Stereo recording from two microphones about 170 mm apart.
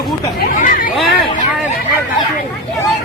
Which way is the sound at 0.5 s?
50° left (ahead or behind).